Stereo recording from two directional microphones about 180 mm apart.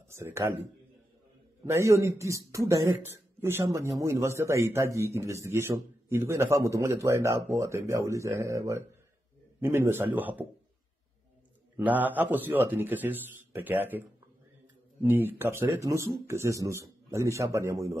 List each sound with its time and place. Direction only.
0.1 s a man's voice: 15° right (ahead or behind)
1.7 s a man's voice: 15° right (ahead or behind)
11.7 s a man's voice: 10° right (ahead or behind)
15.0 s a man's voice: 10° right (ahead or behind)